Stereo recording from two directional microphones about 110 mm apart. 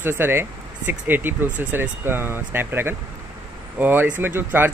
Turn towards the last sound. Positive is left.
turn(degrees=-20)  # may be behind; listen again after turning